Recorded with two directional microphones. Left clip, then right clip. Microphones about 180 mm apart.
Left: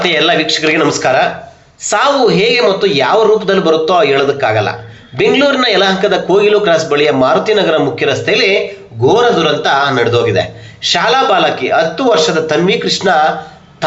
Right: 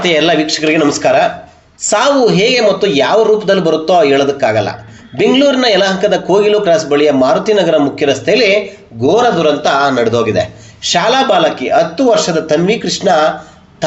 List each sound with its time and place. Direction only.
0.0 s speech: 45° right (ahead or behind)